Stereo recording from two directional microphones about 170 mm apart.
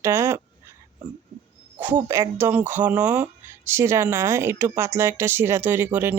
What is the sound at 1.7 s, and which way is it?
Speech, 10° right (ahead or behind).